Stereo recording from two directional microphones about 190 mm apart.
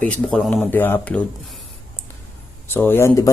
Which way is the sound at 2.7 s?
10° left (ahead or behind).